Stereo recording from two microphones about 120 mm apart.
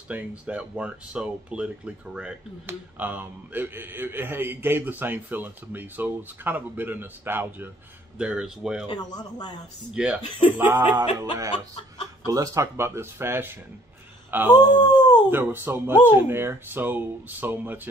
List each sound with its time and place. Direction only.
0.5 s speech: 10° right (ahead or behind)
8.8 s speech: 35° left (ahead or behind)
9.9 s speech: 10° right (ahead or behind)
10.8 s music: 30° right (ahead or behind)
11.1 s speech: 25° right (ahead or behind)
11.5 s a sound: 40° left (ahead or behind)
12.3 s speech: 30° right (ahead or behind)
14.5 s speech: 35° left (ahead or behind)
15.2 s speech: 15° right (ahead or behind)